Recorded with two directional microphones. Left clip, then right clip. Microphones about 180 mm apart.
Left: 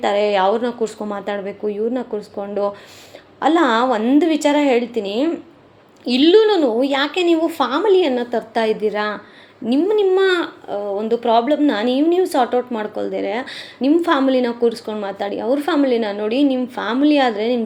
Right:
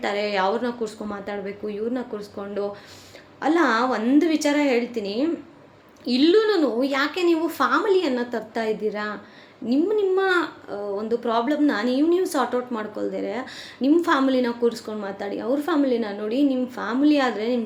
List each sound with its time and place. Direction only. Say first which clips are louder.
0.0 s speech: left 7 dB; 20° left (ahead or behind)